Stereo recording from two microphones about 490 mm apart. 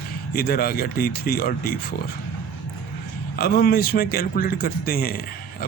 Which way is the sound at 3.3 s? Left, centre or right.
Centre.